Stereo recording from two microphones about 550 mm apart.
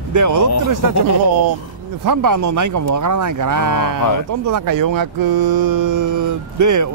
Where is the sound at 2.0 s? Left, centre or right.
Right.